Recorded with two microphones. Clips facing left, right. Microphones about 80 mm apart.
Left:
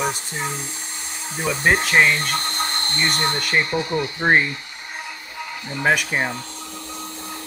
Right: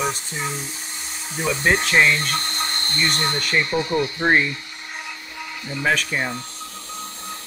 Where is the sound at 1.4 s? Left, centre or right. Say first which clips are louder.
Left 1 dB; centre.